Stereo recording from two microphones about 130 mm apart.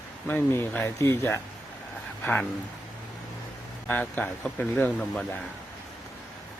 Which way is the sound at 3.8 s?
15° left (ahead or behind).